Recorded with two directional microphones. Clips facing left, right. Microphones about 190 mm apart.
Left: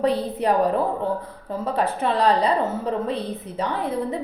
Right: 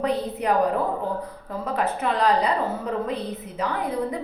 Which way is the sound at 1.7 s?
30° left (ahead or behind).